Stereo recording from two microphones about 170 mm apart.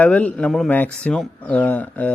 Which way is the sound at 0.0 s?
10° left (ahead or behind).